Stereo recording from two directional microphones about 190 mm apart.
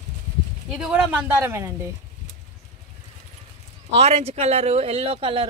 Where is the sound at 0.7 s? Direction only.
5° right (ahead or behind).